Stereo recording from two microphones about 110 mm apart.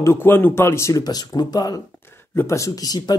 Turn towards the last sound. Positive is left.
turn(degrees=35)  # may be behind; listen again after turning